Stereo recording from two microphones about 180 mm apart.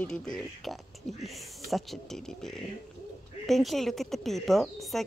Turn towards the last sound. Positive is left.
turn(degrees=0)  # may be behind; listen again after turning